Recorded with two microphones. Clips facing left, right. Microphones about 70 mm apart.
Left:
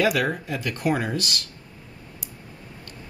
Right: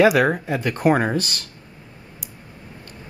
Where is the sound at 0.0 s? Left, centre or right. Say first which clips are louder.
Right 7 dB; right.